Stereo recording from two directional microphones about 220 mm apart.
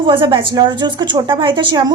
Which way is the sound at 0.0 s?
25° right (ahead or behind).